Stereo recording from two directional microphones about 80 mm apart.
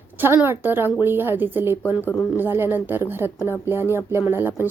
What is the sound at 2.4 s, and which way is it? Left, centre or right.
Speech, right.